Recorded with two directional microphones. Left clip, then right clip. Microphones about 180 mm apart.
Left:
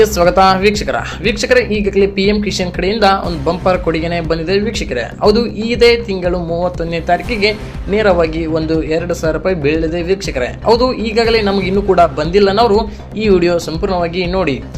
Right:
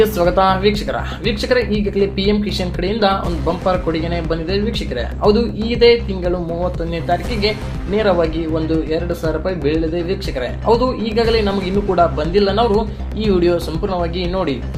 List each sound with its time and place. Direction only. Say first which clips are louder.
0.0 s speech: left 4 dB; 40° left (ahead or behind)